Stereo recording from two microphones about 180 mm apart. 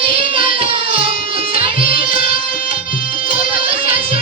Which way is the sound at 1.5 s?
30° right (ahead or behind).